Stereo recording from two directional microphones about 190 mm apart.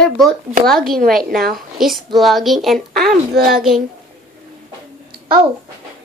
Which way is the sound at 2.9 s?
50° right (ahead or behind).